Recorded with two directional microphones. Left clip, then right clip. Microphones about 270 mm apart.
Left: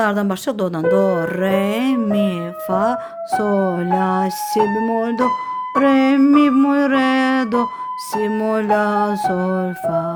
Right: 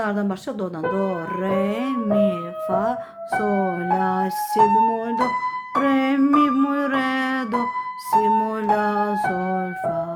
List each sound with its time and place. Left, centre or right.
0.0 s speech: left
3.3 s music: left